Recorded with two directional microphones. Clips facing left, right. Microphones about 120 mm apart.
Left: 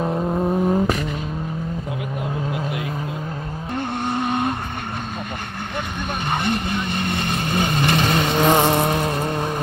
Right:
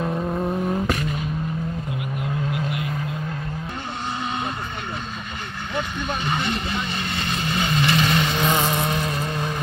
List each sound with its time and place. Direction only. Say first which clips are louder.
0.0 s vehicle: left 3 dB; 20° left (ahead or behind)
4.2 s vehicle: left 6 dB; 60° left (ahead or behind)
6.2 s vehicle: left 5 dB; 50° left (ahead or behind); by 9.3 s 35° left (ahead or behind)